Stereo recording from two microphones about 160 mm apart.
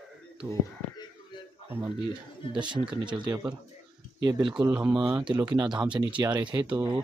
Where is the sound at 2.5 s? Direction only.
30° right (ahead or behind).